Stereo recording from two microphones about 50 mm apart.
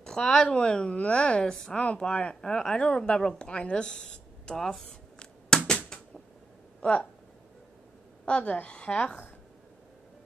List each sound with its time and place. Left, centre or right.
0.0 s speech: centre
1.4 s a woman's voice: centre
2.0 s a woman's voice: left
5.5 s a sound: centre
5.9 s cupboard open or close: centre
6.8 s speech: left
8.3 s speech: left